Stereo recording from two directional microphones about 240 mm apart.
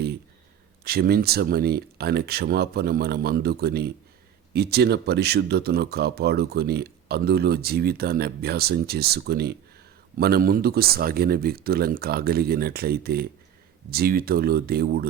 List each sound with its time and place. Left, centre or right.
0.9 s speech: right